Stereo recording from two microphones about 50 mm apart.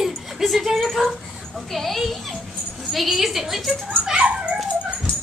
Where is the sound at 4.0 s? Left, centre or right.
Right.